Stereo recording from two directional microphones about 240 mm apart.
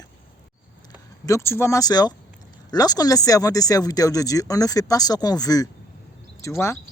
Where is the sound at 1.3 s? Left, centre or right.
Centre.